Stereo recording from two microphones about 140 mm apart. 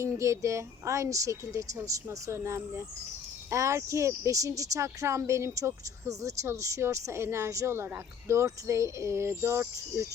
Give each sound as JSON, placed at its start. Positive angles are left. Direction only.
{"t": 0.0, "sound": "speech", "side_deg": -20}